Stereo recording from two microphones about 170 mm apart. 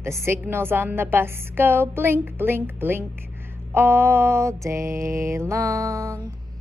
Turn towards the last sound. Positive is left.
turn(degrees=-20)  # may be behind; listen again after turning